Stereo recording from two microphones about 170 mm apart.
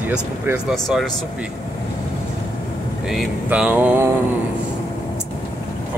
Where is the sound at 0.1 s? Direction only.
5° right (ahead or behind).